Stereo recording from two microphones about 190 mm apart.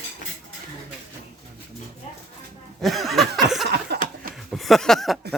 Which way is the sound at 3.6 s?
60° right (ahead or behind).